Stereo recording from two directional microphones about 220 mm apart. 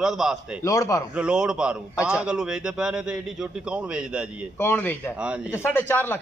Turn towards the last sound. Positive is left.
turn(degrees=10)  # may be behind; listen again after turning